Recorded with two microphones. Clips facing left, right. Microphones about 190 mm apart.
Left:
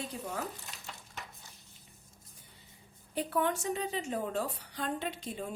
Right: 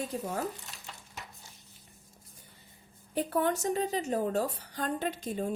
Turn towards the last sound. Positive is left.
turn(degrees=-45)  # may be behind; listen again after turning